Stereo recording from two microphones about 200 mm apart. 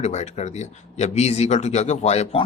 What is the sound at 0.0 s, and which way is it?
A man's voice, 35° left (ahead or behind).